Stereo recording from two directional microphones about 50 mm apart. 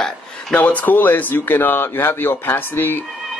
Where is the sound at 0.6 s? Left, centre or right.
Left.